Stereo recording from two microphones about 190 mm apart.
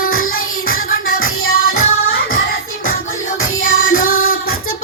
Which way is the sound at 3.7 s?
90° left.